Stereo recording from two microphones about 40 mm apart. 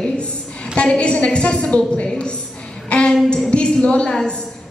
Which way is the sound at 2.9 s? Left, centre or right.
Left.